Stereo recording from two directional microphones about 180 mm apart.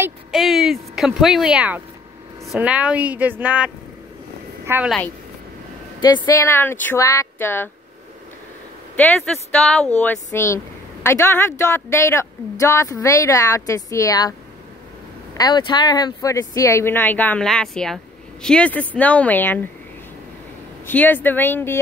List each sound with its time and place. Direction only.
0.3 s a woman's voice: centre (ahead or behind)
5.9 s speech: 25° left (ahead or behind)
8.9 s speech: 10° left (ahead or behind)
15.3 s speech: 25° left (ahead or behind)
20.8 s speech: 10° left (ahead or behind)